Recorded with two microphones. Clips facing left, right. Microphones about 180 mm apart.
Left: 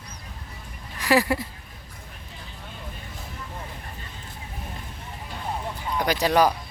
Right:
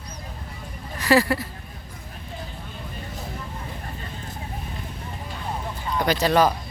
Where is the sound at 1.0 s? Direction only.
15° left (ahead or behind).